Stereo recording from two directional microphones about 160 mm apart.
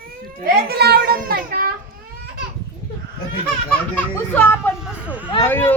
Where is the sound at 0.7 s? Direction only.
80° right.